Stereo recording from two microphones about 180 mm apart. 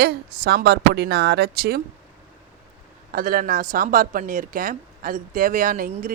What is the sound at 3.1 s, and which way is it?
Speech, 55° right (ahead or behind).